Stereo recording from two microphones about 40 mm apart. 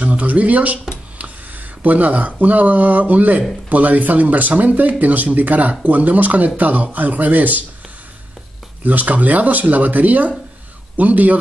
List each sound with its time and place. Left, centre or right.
0.0 s speech: right
8.8 s speech: right